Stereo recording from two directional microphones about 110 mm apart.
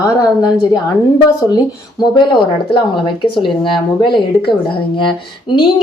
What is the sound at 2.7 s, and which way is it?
Speech, 45° left (ahead or behind).